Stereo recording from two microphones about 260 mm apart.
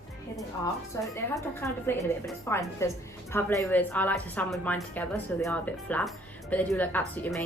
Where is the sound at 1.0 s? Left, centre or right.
Centre.